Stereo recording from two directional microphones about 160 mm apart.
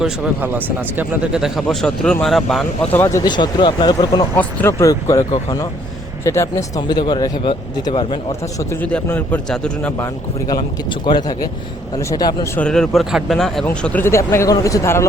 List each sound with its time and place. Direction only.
0.9 s speech: 5° right (ahead or behind)
2.9 s speech: 15° left (ahead or behind)
4.4 s a man's voice: 10° left (ahead or behind)
6.2 s speech: 20° left (ahead or behind)
8.5 s a man's voice: 10° left (ahead or behind)
10.4 s speech: 25° left (ahead or behind)
12.5 s a man's voice: 5° left (ahead or behind)